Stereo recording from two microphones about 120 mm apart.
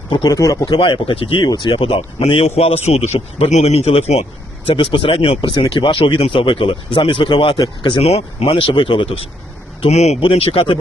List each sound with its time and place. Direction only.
0.3 s speech: 30° left (ahead or behind)
0.6 s speech: 45° left (ahead or behind); by 4.3 s 65° left (ahead or behind)
4.7 s speech: 45° left (ahead or behind)
5.4 s speech: 40° left (ahead or behind)
8.0 s speech: 60° left (ahead or behind)
9.8 s speech: 65° left (ahead or behind)
10.2 s speech: 50° left (ahead or behind)